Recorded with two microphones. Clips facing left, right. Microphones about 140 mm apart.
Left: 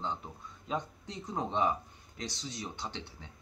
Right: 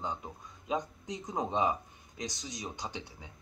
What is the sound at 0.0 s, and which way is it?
Speech, 15° right (ahead or behind).